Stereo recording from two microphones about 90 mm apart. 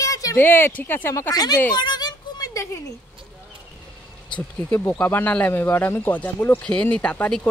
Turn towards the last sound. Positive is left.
turn(degrees=15)  # may be behind; listen again after turning